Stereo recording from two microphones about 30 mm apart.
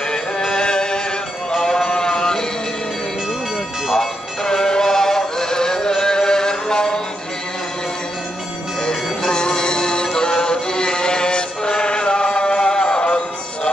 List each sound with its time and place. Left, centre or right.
0.5 s music: left
3.9 s music: centre
8.8 s music: left